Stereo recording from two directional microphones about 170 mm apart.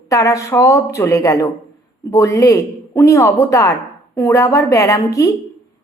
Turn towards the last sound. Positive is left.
turn(degrees=20)  # may be behind; listen again after turning